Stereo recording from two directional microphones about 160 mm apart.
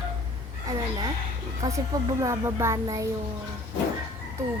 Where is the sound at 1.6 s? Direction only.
20° right (ahead or behind).